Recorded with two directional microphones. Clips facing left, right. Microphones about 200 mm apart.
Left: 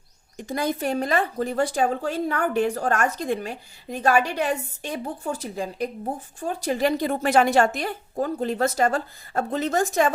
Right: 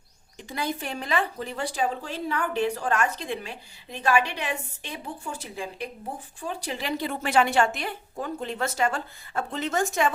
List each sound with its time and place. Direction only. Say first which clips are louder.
0.3 s a woman's voice: left 5 dB; 45° left (ahead or behind)